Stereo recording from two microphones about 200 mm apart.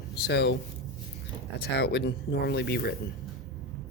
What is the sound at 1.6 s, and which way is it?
Speech, 55° left (ahead or behind).